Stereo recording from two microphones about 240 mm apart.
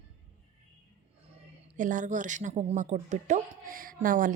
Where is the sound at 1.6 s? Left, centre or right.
Right.